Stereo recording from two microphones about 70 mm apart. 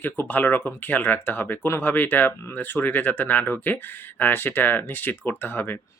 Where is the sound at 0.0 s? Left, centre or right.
Left.